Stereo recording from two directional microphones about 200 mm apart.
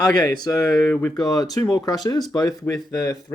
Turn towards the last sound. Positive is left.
turn(degrees=15)  # may be behind; listen again after turning